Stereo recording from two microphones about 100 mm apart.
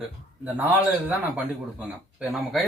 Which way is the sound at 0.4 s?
15° right (ahead or behind).